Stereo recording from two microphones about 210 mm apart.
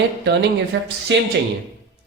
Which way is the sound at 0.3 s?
55° right (ahead or behind).